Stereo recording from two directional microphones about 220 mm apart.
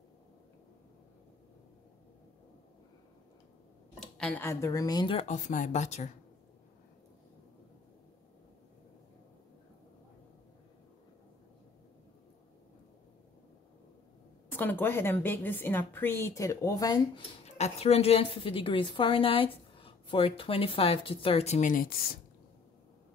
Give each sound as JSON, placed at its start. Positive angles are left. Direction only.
{"t": 4.0, "sound": "speech", "side_deg": 5}
{"t": 5.3, "sound": "speech", "side_deg": 35}
{"t": 14.5, "sound": "a woman's voice", "side_deg": 10}
{"t": 17.5, "sound": "a woman's voice", "side_deg": 30}